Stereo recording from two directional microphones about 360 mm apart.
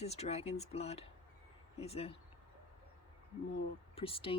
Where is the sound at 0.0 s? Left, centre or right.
Centre.